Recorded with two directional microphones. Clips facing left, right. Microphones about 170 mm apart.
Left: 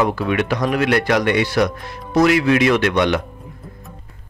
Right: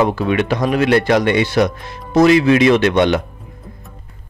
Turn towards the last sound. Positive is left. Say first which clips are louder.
# right 3 dB
turn(degrees=-25)  # may be behind; listen again after turning